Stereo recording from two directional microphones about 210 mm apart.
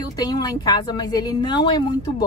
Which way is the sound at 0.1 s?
20° left (ahead or behind).